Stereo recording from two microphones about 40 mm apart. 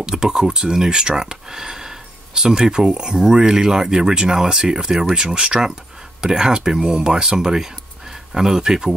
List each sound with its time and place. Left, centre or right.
0.0 s speech: centre